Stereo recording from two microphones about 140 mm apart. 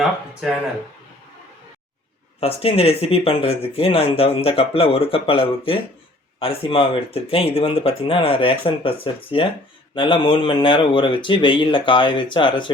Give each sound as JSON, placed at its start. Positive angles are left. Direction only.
{"t": 2.4, "sound": "speech", "side_deg": 45}